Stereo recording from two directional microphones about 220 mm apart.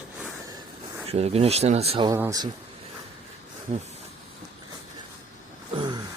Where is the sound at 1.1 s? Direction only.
30° right (ahead or behind).